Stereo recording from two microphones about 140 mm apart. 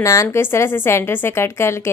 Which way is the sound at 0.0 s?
20° left (ahead or behind).